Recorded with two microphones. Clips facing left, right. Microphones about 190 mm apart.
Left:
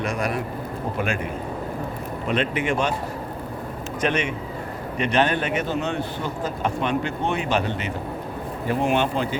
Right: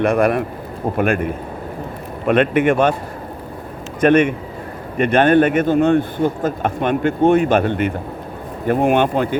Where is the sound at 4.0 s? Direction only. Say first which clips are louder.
Right 11 dB; 55° right (ahead or behind).